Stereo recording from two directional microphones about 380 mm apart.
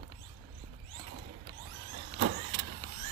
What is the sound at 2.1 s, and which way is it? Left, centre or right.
Vehicle, right.